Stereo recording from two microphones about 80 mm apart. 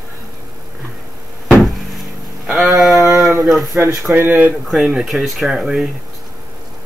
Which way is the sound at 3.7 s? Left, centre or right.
Right.